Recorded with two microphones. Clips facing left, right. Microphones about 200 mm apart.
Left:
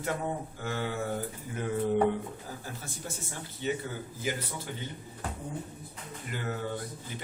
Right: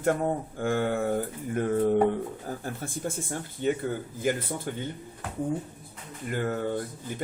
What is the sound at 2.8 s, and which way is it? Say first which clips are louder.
Speech: right 8 dB; 55° right (ahead or behind).